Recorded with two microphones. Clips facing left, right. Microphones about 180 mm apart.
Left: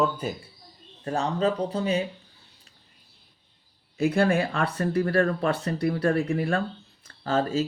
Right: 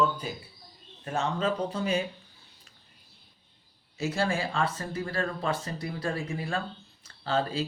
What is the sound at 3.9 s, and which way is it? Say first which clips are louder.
Speech: left 7 dB; 55° left (ahead or behind).